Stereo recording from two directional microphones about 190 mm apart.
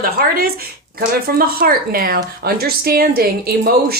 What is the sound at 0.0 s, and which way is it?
Speech, 50° right (ahead or behind).